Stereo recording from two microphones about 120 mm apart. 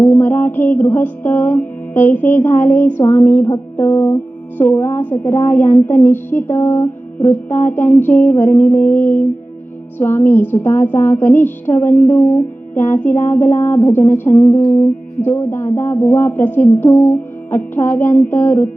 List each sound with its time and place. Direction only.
0.0 s music: 15° left (ahead or behind)
15.8 s speech: 20° left (ahead or behind)
16.4 s music: 15° left (ahead or behind)